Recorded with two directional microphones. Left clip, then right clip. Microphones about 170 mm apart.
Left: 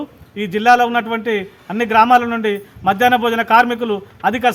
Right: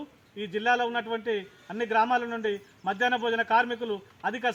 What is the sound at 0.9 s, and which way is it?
A man's voice, 20° left (ahead or behind).